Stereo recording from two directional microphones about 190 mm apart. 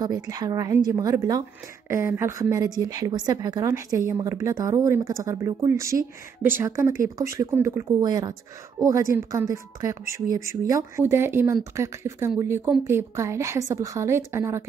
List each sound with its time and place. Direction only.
0.0 s a woman's voice: 20° right (ahead or behind)